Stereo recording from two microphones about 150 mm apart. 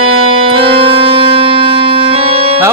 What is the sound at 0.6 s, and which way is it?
Music, 35° right (ahead or behind).